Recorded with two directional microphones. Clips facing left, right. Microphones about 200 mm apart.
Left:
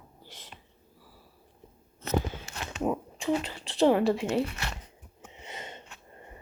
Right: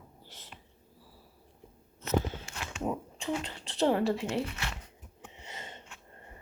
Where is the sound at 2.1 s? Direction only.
35° left (ahead or behind).